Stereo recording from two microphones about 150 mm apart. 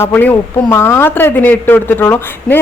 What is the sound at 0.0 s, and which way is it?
A woman's voice, 10° left (ahead or behind).